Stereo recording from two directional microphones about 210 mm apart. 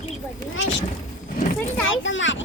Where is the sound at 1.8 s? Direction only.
65° left (ahead or behind).